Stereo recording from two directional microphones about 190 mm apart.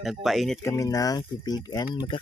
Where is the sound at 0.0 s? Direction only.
Centre (ahead or behind).